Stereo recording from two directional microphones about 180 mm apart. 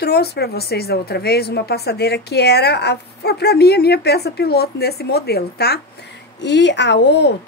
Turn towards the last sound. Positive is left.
turn(degrees=75)  # may be behind; listen again after turning